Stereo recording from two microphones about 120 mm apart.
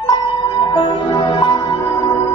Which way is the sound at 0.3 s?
40° left (ahead or behind).